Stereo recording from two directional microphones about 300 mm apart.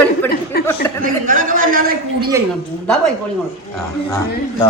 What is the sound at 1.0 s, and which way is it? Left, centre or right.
A man's voice, right.